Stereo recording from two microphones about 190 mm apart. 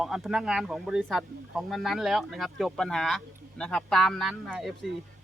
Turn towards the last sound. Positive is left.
turn(degrees=0)  # may be behind; listen again after turning